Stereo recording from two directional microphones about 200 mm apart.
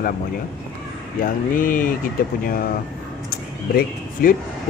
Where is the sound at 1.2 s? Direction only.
45° left (ahead or behind).